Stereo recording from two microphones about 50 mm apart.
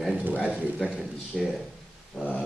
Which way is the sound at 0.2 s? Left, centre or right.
Right.